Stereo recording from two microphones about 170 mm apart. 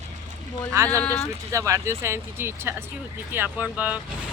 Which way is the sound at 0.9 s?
10° left (ahead or behind).